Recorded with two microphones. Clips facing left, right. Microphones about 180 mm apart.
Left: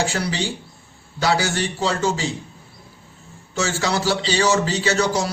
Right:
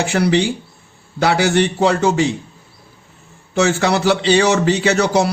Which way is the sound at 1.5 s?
60° right (ahead or behind).